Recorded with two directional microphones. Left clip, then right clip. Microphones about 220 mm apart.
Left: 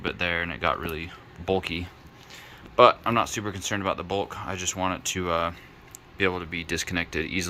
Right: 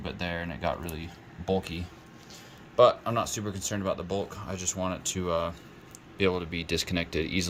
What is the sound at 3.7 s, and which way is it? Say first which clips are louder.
Speech: left 3 dB; 5° left (ahead or behind).